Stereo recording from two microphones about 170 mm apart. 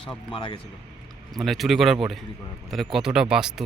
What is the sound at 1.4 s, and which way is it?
Speech, centre (ahead or behind).